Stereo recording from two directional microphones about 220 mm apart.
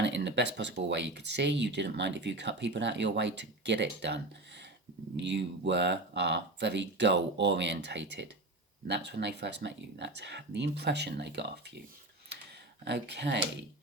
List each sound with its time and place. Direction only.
0.0 s a sound: 55° right (ahead or behind)
0.9 s speech: 50° right (ahead or behind)
12.8 s speech: 50° right (ahead or behind)